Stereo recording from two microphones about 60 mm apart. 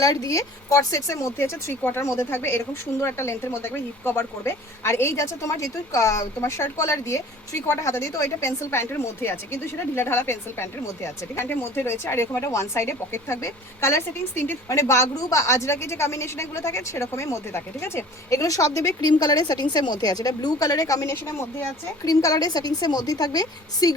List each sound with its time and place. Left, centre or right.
0.0 s speech: left
1.8 s a woman's voice: left
6.4 s a woman's voice: left
11.4 s speech: left
11.9 s a woman's voice: left
20.0 s speech: left
22.0 s a woman's voice: left